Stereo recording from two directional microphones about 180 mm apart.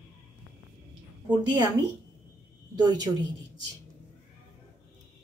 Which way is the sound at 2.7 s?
20° right (ahead or behind).